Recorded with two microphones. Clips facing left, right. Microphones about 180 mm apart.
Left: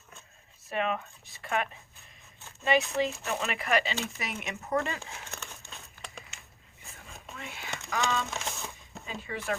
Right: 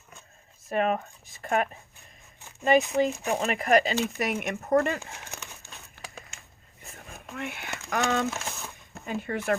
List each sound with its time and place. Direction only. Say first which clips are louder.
0.7 s speech: right 5 dB; 45° right (ahead or behind)
3.1 s speech: right 6 dB; 15° right (ahead or behind)
3.3 s speech: right 7 dB; 45° right (ahead or behind)
5.3 s crumpling: right 1 dB; 10° right (ahead or behind)
6.9 s a sound: right 6 dB; 60° right (ahead or behind)
7.9 s speech: right 5 dB; 55° right (ahead or behind)
8.3 s a sound: right 2 dB; centre (ahead or behind)
9.0 s speech: right 6 dB; 55° right (ahead or behind)